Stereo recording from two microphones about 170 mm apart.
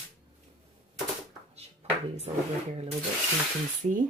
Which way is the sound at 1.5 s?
40° right (ahead or behind).